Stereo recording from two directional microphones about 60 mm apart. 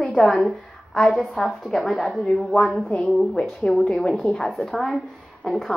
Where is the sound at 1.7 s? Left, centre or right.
Centre.